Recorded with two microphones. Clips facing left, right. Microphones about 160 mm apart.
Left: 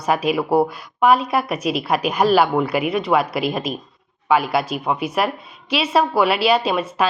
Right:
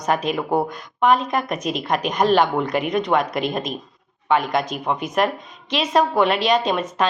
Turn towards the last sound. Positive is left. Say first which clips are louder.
# left 1 dB
turn(degrees=10)  # may be behind; listen again after turning